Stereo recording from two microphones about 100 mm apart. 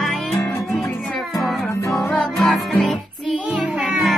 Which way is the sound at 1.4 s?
Centre (ahead or behind).